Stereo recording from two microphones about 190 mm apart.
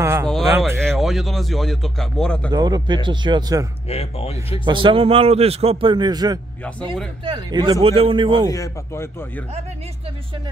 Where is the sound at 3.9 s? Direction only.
30° left (ahead or behind).